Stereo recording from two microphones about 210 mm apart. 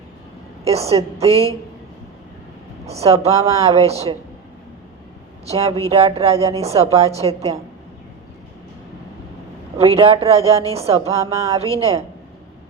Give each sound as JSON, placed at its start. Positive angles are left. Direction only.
{"t": 0.6, "sound": "a woman's voice", "side_deg": -30}
{"t": 2.8, "sound": "a woman's voice", "side_deg": -30}
{"t": 5.5, "sound": "a woman's voice", "side_deg": -30}
{"t": 9.7, "sound": "a woman's voice", "side_deg": -30}
{"t": 11.1, "sound": "a sound", "side_deg": -15}
{"t": 11.4, "sound": "a woman's voice", "side_deg": -30}